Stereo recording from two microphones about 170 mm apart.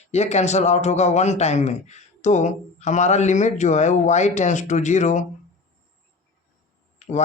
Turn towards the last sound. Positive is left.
turn(degrees=45)  # may be behind; listen again after turning